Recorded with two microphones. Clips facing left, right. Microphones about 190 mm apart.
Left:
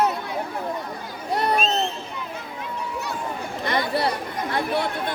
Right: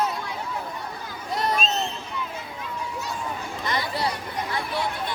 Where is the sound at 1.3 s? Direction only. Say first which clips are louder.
Left 3 dB; 60° left (ahead or behind).